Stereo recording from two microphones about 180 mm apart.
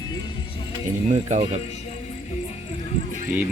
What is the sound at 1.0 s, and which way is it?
Speech, 40° right (ahead or behind).